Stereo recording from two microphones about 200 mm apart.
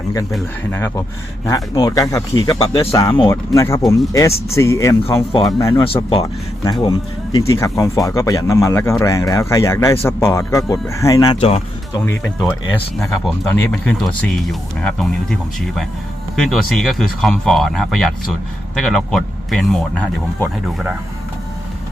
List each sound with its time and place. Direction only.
0.3 s speech: centre (ahead or behind)
1.5 s speech: 20° left (ahead or behind)
5.8 s speech: 30° left (ahead or behind)
6.2 s speech: 15° left (ahead or behind)
12.0 s speech: 10° left (ahead or behind)